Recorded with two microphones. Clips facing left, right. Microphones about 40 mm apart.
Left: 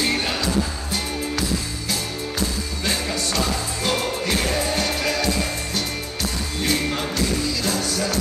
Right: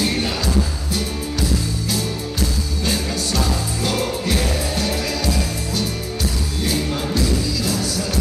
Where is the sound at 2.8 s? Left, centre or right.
Left.